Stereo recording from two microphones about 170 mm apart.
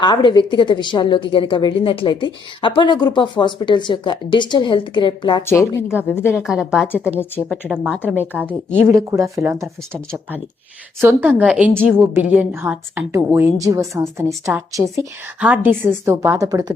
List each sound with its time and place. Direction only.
0.0 s a woman's voice: 25° left (ahead or behind)
5.4 s a woman's voice: 15° left (ahead or behind)
6.3 s a woman's voice: 5° right (ahead or behind)
8.0 s a woman's voice: 10° right (ahead or behind)
11.0 s a woman's voice: 10° right (ahead or behind)
11.7 s a woman's voice: 5° left (ahead or behind)
11.9 s a woman's voice: 10° right (ahead or behind)